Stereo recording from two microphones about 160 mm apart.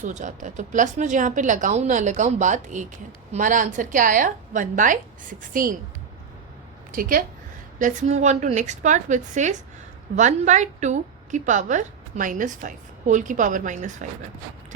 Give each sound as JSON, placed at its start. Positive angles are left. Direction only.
{"t": 0.0, "sound": "a woman's voice", "side_deg": -50}
{"t": 6.9, "sound": "a woman's voice", "side_deg": -65}
{"t": 7.8, "sound": "a woman's voice", "side_deg": -50}